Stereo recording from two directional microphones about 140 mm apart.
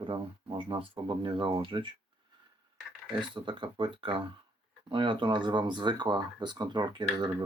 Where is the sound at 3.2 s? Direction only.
35° right (ahead or behind).